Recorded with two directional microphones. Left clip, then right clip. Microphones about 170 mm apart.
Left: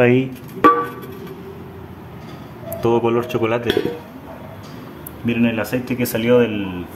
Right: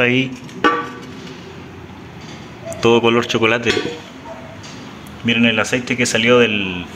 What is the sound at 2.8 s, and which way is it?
Speech, centre (ahead or behind).